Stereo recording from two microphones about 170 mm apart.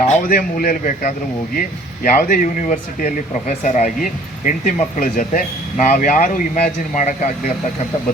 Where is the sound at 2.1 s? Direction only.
50° left (ahead or behind).